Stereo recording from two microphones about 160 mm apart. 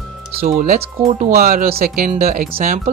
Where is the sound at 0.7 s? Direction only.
45° right (ahead or behind).